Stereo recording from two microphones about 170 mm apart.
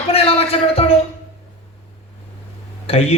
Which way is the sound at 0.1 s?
35° left (ahead or behind).